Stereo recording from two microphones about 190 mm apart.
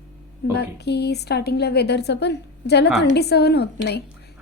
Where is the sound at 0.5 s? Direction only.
60° left (ahead or behind).